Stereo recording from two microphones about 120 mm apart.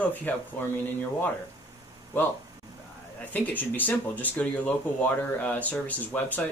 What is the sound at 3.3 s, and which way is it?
Speech, 15° left (ahead or behind).